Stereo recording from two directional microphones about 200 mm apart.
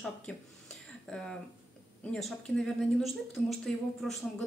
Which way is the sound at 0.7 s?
5° left (ahead or behind).